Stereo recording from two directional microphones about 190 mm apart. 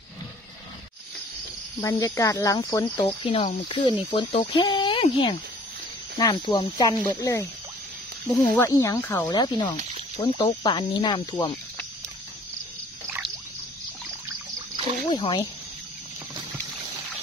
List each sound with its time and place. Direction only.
1.8 s speech: 15° left (ahead or behind)
9.4 s speech: 20° left (ahead or behind)
15.0 s speech: 25° left (ahead or behind)